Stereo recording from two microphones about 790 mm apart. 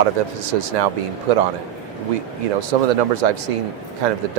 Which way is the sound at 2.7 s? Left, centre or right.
Right.